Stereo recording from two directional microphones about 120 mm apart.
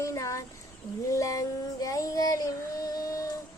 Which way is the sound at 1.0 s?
25° left (ahead or behind).